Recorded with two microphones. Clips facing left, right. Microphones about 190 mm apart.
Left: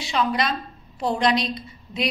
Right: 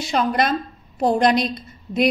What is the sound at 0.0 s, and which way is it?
A woman's voice, 45° right (ahead or behind).